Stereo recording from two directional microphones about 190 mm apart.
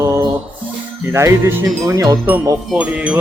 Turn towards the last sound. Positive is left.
turn(degrees=-5)  # may be behind; listen again after turning